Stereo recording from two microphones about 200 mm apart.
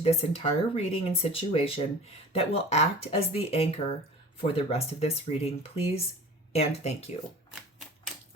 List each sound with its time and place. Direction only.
0.0 s speech: 30° left (ahead or behind)